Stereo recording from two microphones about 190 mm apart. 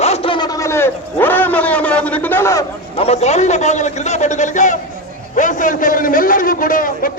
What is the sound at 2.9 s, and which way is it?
A man's voice, 30° left (ahead or behind).